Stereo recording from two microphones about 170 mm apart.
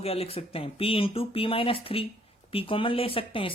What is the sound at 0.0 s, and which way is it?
Speech, 35° left (ahead or behind).